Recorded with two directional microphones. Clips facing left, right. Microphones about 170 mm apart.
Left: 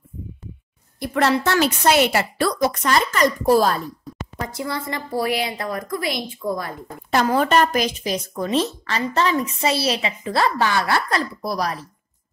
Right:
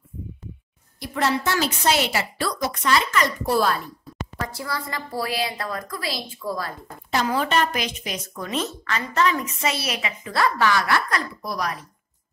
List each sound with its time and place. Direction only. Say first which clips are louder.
0.9 s a woman's voice: left 4 dB; 60° left (ahead or behind); by 3.9 s 40° left (ahead or behind)
4.5 s a woman's voice: left 4 dB; 20° left (ahead or behind)
7.1 s a woman's voice: left 5 dB; 50° left (ahead or behind); by 11.8 s 35° left (ahead or behind)